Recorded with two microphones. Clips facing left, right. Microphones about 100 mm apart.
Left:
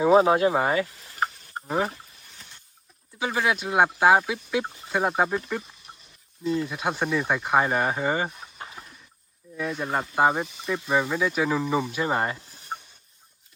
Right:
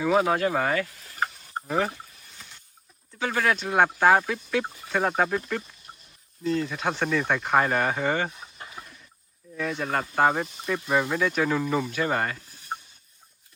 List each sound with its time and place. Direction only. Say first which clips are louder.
0.0 s speech: left 4 dB; 25° left (ahead or behind)
3.2 s speech: even; 10° left (ahead or behind)
6.4 s speech: even; 15° left (ahead or behind)
9.6 s speech: even; 10° left (ahead or behind)